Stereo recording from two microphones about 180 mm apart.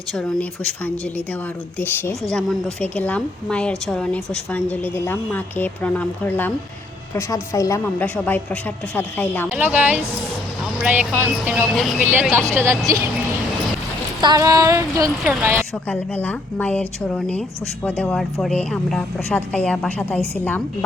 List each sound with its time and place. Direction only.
0.1 s speech: 5° left (ahead or behind)
1.8 s a woman's voice: 10° left (ahead or behind)
9.5 s speech: 10° right (ahead or behind)
11.8 s speech: centre (ahead or behind)
12.0 s speech: 15° right (ahead or behind)
14.2 s a sound: 20° right (ahead or behind)
15.2 s speech: 5° right (ahead or behind)
15.9 s a woman's voice: 10° left (ahead or behind)